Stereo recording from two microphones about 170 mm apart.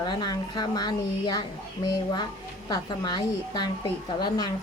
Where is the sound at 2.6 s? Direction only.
25° left (ahead or behind).